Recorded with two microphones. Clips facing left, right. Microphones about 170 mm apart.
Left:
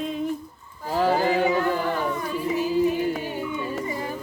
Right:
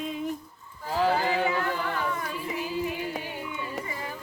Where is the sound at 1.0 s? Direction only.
45° left (ahead or behind).